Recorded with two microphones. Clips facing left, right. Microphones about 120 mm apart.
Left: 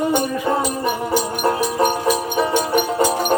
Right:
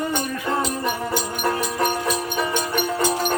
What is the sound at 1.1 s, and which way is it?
Music, 20° left (ahead or behind).